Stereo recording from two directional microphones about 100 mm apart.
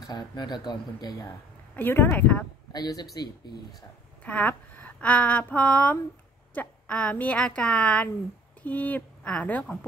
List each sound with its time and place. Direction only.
0.0 s speech: 45° left (ahead or behind)
1.8 s speech: 20° left (ahead or behind)
2.7 s speech: 45° left (ahead or behind)
4.2 s a woman's voice: 15° left (ahead or behind)